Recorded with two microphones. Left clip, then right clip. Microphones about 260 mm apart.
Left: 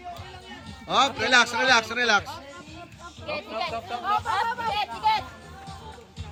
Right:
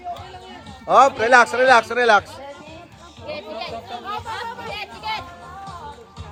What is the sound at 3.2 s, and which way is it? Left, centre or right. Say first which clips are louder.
Speech: even; centre.